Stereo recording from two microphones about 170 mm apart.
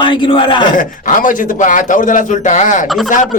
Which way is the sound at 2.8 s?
Centre (ahead or behind).